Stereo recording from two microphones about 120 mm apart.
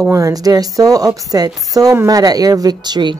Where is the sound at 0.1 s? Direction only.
30° right (ahead or behind).